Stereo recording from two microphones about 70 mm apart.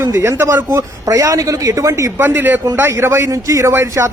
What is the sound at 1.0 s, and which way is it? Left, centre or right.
A man's voice, right.